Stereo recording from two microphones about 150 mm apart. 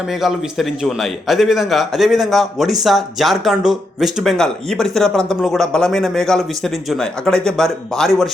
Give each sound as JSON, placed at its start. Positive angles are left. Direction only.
{"t": 0.2, "sound": "a man's voice", "side_deg": 0}